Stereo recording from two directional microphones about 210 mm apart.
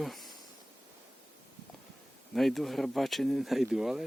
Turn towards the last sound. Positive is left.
turn(degrees=0)  # may be behind; listen again after turning